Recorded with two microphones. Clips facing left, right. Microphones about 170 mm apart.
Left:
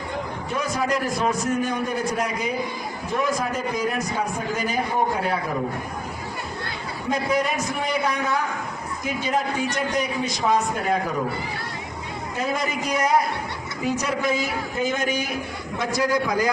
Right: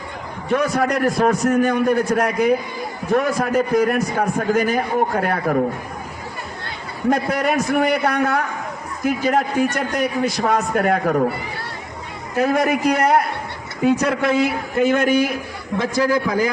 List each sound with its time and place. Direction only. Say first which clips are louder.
0.5 s a man's voice: right 6 dB; 60° right (ahead or behind)
7.1 s a man's voice: right 4 dB; 60° right (ahead or behind)
12.4 s a man's voice: right 9 dB; 60° right (ahead or behind)